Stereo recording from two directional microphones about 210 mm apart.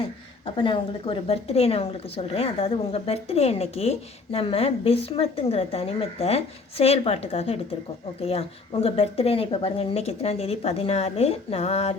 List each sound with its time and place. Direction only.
0.4 s a woman's voice: 25° left (ahead or behind)